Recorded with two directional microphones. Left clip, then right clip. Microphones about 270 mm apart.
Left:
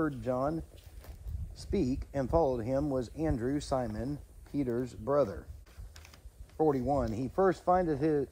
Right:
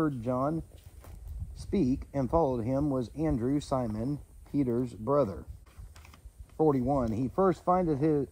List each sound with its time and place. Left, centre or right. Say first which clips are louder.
0.0 s speech: right 2 dB; right
1.6 s speech: right 3 dB; right